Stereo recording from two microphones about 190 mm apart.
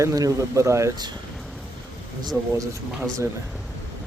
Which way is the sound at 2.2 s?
15° right (ahead or behind).